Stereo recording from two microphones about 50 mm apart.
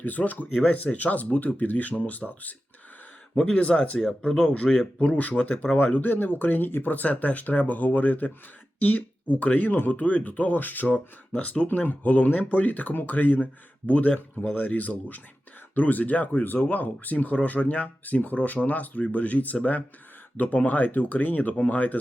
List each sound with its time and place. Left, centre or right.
0.0 s speech: left
5.7 s speech: left
6.9 s speech: left